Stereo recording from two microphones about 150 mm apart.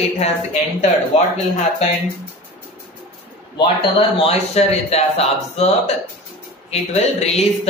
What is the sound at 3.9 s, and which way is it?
Speech, 45° left (ahead or behind).